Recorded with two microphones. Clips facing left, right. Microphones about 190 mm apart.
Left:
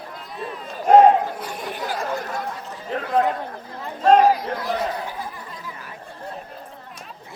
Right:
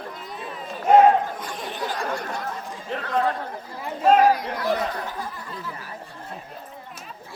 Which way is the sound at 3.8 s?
5° right (ahead or behind).